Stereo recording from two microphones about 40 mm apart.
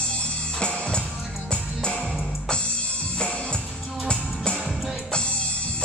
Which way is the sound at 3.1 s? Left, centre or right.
Left.